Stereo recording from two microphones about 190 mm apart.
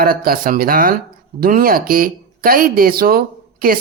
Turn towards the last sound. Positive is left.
turn(degrees=-50)  # may be behind; listen again after turning